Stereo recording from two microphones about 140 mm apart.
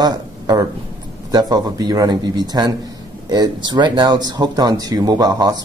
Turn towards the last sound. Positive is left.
turn(degrees=-25)  # may be behind; listen again after turning